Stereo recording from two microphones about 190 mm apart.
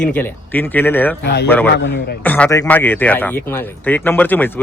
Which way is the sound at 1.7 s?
70° left (ahead or behind).